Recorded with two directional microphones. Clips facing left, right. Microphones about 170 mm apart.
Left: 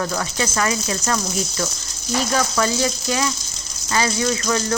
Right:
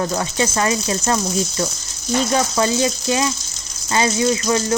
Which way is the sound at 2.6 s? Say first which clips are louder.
Right 3 dB; 20° right (ahead or behind).